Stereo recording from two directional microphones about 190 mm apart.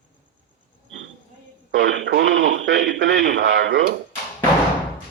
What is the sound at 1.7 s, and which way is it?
Radio, 80° right.